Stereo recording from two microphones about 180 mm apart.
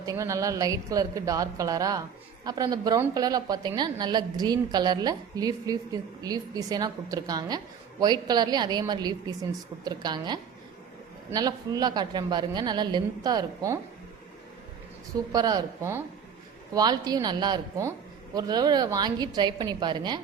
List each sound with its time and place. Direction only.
0.0 s a woman's voice: 20° right (ahead or behind)
15.3 s a woman's voice: 20° right (ahead or behind)